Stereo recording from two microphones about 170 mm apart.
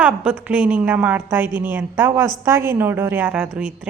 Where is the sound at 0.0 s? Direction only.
10° right (ahead or behind).